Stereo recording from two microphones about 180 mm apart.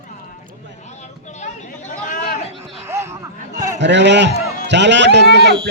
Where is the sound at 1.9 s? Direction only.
45° left (ahead or behind).